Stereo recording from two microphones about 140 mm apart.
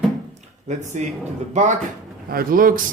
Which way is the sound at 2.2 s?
90° right.